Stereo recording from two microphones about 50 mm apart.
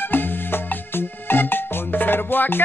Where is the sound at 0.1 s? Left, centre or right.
Left.